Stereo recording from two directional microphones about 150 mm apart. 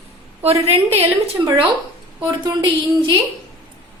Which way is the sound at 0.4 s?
45° right (ahead or behind).